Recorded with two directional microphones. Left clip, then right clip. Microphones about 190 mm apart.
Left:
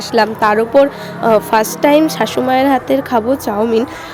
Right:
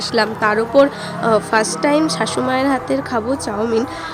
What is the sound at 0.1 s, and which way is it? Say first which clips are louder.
A woman's voice: left 5 dB; 15° left (ahead or behind).